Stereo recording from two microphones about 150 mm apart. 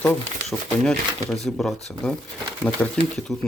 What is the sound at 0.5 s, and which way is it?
Speech, 5° left (ahead or behind).